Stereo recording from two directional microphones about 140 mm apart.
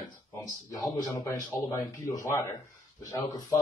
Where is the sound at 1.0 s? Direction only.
20° left (ahead or behind).